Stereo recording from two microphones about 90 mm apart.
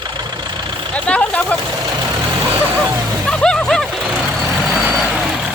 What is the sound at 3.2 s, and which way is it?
Music, 5° left (ahead or behind).